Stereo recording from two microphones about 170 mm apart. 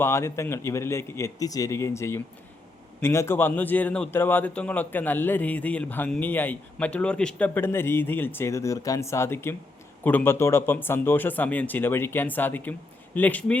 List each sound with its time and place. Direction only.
0.0 s a man's voice: 15° left (ahead or behind)